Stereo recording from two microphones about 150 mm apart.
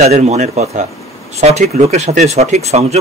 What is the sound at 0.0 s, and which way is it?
Speech, 45° right (ahead or behind).